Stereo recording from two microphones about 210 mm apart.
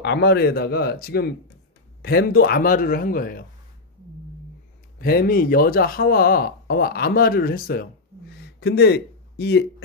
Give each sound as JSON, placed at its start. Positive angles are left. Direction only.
{"t": 0.0, "sound": "speech", "side_deg": 50}
{"t": 4.9, "sound": "speech", "side_deg": 45}
{"t": 8.4, "sound": "a sound", "side_deg": 50}